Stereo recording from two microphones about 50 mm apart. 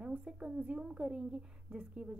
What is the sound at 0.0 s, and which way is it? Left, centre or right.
A woman's voice, centre.